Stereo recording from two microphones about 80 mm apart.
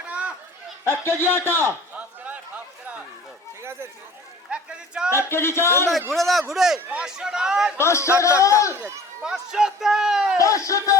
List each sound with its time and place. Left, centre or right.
0.0 s a sound: centre
0.9 s a man's voice: left
2.0 s a sound: centre
3.6 s a sound: right
4.5 s speech: centre
5.1 s a man's voice: left
6.1 s speech: centre
7.8 s a man's voice: left
9.2 s speech: centre
10.3 s a man's voice: left